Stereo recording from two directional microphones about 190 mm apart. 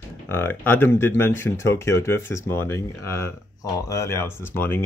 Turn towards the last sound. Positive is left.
turn(degrees=10)  # may be behind; listen again after turning